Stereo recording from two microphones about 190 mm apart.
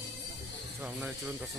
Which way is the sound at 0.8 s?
5° right (ahead or behind).